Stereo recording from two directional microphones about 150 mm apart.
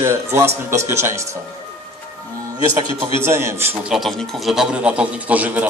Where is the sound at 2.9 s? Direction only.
15° right (ahead or behind).